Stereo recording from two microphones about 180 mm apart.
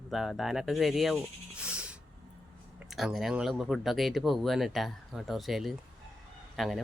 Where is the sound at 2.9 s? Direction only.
Centre (ahead or behind).